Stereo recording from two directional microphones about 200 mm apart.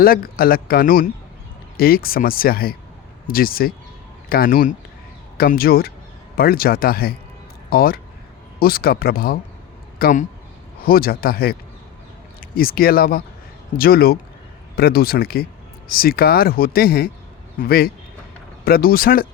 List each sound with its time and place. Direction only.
0.0 s speech: 45° left (ahead or behind)